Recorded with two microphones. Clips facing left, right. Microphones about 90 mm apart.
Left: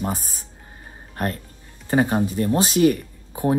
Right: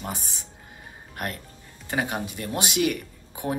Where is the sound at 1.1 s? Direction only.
35° left (ahead or behind).